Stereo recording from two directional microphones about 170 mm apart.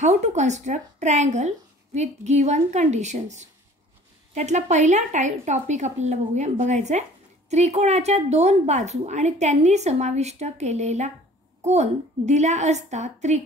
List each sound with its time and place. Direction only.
0.0 s a woman's voice: 40° right (ahead or behind)